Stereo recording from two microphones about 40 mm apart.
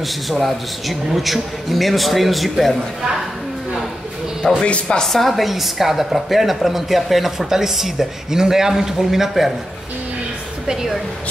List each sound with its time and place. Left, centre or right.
0.0 s a man's voice: centre
4.6 s speech: left
5.1 s a woman's voice: centre
10.7 s a woman's voice: centre